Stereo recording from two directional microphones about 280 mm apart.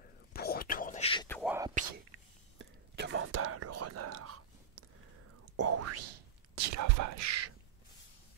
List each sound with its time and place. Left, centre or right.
0.3 s whispering: left
1.3 s whispering: centre
1.7 s whispering: right
2.6 s whispering: right
6.5 s whispering: right